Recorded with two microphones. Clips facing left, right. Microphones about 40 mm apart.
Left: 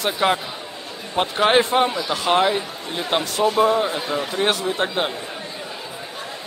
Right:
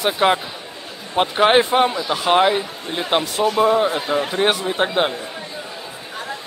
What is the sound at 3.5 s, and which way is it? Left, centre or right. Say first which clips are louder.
Speech: right 3 dB; centre.